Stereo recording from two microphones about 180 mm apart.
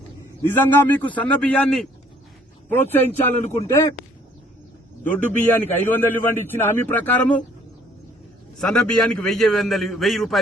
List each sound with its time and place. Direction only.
0.4 s a man's voice: 10° left (ahead or behind)
5.0 s a man's voice: 10° left (ahead or behind)
8.5 s a man's voice: 5° left (ahead or behind)